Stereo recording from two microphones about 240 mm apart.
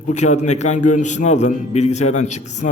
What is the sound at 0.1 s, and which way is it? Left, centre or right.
A man's voice, left.